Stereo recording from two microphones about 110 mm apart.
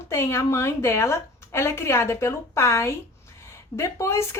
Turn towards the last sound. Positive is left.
turn(degrees=25)  # may be behind; listen again after turning